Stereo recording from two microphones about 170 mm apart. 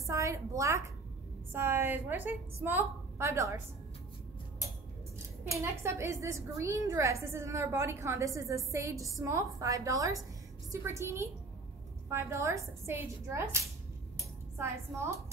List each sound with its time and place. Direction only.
0.0 s a woman's voice: 20° right (ahead or behind)
5.4 s a woman's voice: 15° right (ahead or behind)
14.1 s a sound: 15° right (ahead or behind)